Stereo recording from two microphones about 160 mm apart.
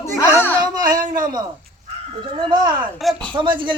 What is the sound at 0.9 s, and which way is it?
Speech, 55° right (ahead or behind).